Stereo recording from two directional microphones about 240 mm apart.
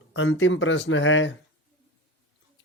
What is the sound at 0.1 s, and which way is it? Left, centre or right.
Speech, left.